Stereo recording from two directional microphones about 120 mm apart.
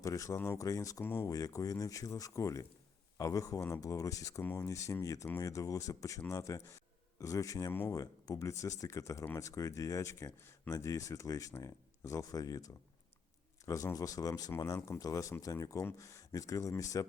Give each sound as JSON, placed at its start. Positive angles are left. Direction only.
{"t": 0.0, "sound": "speech", "side_deg": 30}
{"t": 7.7, "sound": "speech", "side_deg": 15}
{"t": 7.9, "sound": "speech", "side_deg": 30}